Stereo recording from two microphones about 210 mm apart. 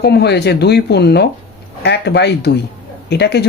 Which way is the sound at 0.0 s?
50° left (ahead or behind).